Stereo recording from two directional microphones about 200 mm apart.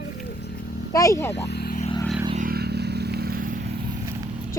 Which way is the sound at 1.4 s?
55° left (ahead or behind).